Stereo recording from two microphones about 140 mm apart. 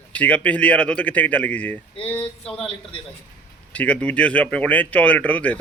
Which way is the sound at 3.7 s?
10° left (ahead or behind).